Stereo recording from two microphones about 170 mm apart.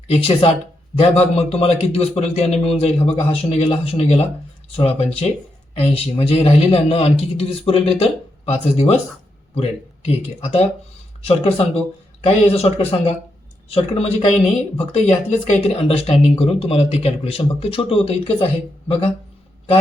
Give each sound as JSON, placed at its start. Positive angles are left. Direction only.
{"t": 0.1, "sound": "speech", "side_deg": 35}